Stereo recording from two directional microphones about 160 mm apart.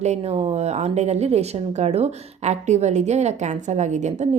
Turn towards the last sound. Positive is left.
turn(degrees=-45)  # may be behind; listen again after turning